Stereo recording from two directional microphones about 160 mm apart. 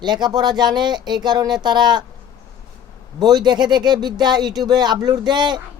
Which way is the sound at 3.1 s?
25° right (ahead or behind).